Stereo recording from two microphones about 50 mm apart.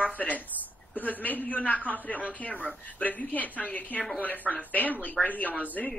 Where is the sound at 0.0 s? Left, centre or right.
Left.